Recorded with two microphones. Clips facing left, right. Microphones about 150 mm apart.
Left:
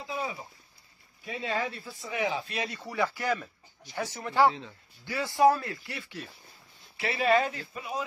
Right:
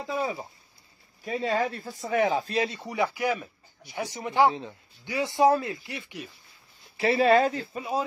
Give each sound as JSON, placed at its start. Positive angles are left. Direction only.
{"t": 0.0, "sound": "a sound", "side_deg": -45}
{"t": 1.2, "sound": "speech", "side_deg": -40}
{"t": 1.5, "sound": "speech", "side_deg": -50}
{"t": 2.4, "sound": "speech", "side_deg": -30}
{"t": 2.8, "sound": "speech", "side_deg": -15}
{"t": 7.0, "sound": "speech", "side_deg": -35}